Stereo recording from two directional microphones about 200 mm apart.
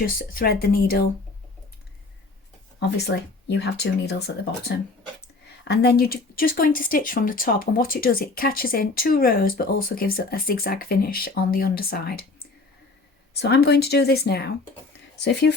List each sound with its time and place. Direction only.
0.0 s speech: 45° left (ahead or behind)
3.1 s speech: 60° left (ahead or behind)
13.4 s speech: 55° left (ahead or behind)